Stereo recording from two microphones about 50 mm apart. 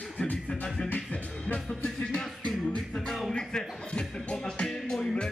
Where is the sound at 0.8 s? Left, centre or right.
Left.